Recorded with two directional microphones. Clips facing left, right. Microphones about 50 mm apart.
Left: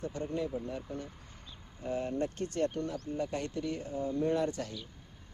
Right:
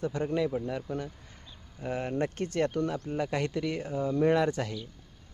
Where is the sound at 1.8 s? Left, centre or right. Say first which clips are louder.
Right 3 dB; right.